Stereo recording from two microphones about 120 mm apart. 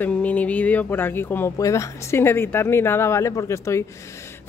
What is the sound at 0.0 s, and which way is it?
Speech, 10° left (ahead or behind).